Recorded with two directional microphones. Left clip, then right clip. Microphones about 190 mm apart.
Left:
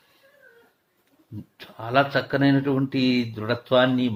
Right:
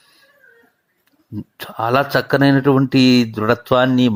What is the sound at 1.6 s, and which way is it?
Speech, 40° right (ahead or behind).